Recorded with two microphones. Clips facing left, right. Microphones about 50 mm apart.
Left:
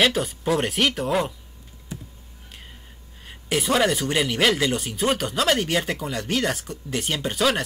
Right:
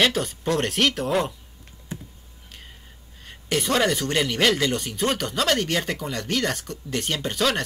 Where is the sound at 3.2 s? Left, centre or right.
Centre.